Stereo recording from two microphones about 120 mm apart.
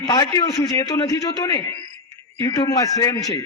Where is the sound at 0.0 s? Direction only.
35° left (ahead or behind).